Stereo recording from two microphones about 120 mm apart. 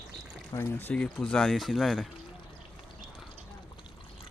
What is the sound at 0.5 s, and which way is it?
Speech, 15° left (ahead or behind).